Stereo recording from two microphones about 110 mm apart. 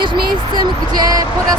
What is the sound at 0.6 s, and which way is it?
Speech, 35° right (ahead or behind).